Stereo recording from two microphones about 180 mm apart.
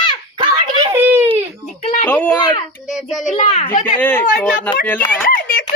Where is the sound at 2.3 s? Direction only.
25° left (ahead or behind).